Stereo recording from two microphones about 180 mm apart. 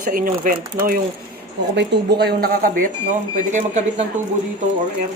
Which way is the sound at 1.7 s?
70° right (ahead or behind).